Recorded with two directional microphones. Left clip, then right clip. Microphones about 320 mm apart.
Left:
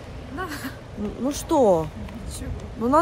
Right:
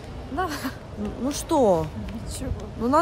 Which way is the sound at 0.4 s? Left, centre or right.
Centre.